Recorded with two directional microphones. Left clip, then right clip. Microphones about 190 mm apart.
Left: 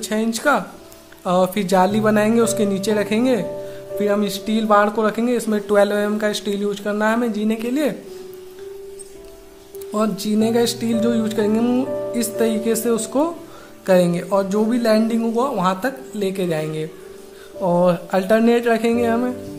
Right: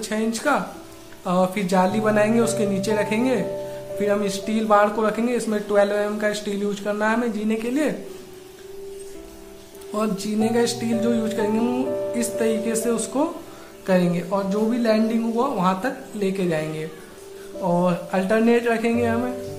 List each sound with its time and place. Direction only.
0.0 s a man's voice: 45° left (ahead or behind)
9.9 s a man's voice: 45° left (ahead or behind)